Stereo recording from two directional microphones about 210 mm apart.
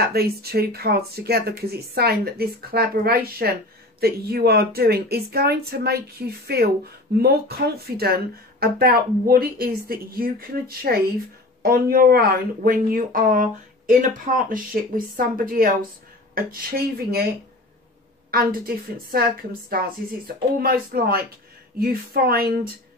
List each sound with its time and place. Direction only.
0.0 s speech: 50° right (ahead or behind)
18.3 s speech: 45° right (ahead or behind)